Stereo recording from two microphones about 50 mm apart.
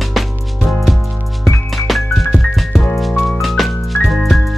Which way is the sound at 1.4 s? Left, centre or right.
Centre.